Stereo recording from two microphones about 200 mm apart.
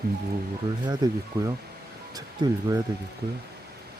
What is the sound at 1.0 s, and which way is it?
Speech, 20° right (ahead or behind).